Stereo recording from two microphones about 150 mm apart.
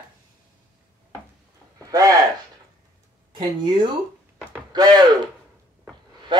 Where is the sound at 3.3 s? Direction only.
30° right (ahead or behind).